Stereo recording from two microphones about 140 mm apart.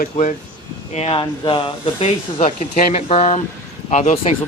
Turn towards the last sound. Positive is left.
turn(degrees=60)  # may be behind; listen again after turning